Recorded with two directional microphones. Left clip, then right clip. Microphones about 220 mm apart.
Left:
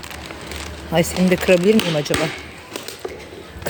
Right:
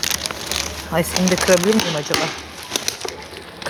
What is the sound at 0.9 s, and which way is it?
Speech, 15° left (ahead or behind).